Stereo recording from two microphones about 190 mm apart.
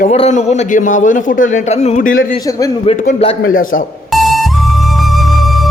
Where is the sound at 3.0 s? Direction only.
35° left (ahead or behind).